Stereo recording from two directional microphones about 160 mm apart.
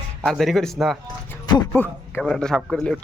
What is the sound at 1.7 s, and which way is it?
A man's voice, 10° left (ahead or behind).